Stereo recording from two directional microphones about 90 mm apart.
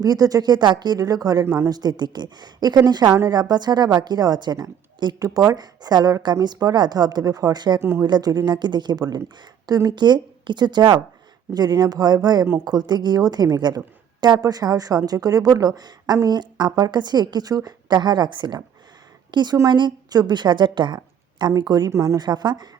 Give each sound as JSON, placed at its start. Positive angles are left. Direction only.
{"t": 0.0, "sound": "a woman's voice", "side_deg": -45}
{"t": 7.8, "sound": "speech", "side_deg": -30}
{"t": 8.0, "sound": "a woman's voice", "side_deg": -50}
{"t": 21.6, "sound": "a woman's voice", "side_deg": -45}
{"t": 21.9, "sound": "speech", "side_deg": -35}
{"t": 22.2, "sound": "a woman's voice", "side_deg": -50}